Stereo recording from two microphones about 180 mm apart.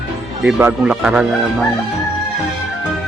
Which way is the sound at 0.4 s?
5° right (ahead or behind).